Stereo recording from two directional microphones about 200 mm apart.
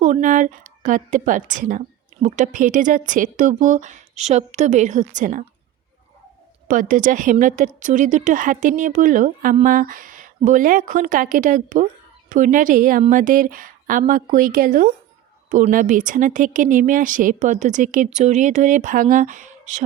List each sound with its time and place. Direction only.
0.0 s speech: 40° right (ahead or behind)
6.7 s speech: 40° right (ahead or behind)